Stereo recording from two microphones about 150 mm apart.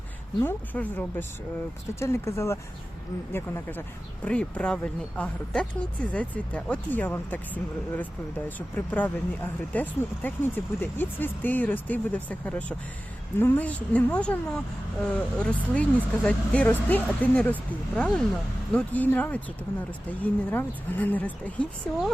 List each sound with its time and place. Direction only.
0.3 s speech: 15° left (ahead or behind)